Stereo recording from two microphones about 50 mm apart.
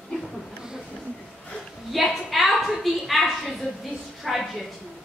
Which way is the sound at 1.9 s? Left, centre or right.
Centre.